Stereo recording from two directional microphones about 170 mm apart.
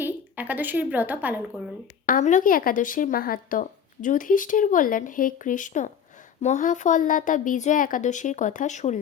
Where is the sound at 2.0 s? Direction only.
50° left (ahead or behind).